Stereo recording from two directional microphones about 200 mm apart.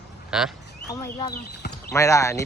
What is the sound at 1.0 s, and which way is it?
Speech, 15° left (ahead or behind).